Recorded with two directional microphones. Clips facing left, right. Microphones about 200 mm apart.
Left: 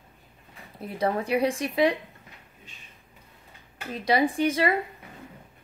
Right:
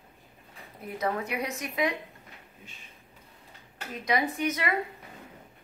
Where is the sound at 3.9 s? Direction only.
30° left (ahead or behind).